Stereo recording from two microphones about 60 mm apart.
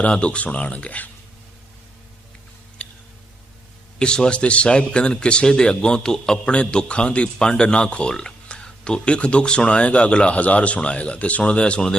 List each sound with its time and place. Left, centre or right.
0.0 s speech: centre
3.9 s a man's voice: centre